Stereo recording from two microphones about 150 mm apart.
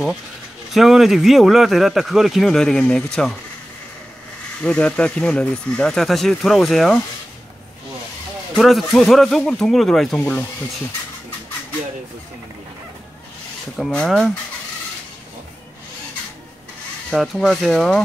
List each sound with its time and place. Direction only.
0.7 s speech: centre (ahead or behind)
4.6 s speech: 10° left (ahead or behind)
8.5 s speech: centre (ahead or behind)
13.7 s speech: centre (ahead or behind)
17.1 s speech: centre (ahead or behind)